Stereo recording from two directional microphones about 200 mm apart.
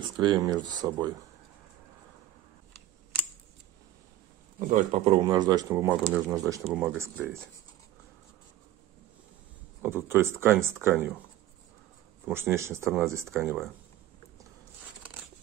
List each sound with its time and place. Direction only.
0.2 s speech: 20° right (ahead or behind)
4.6 s speech: 40° right (ahead or behind)
5.2 s speech: 20° right (ahead or behind)
9.8 s speech: 10° right (ahead or behind)
12.3 s speech: 10° right (ahead or behind)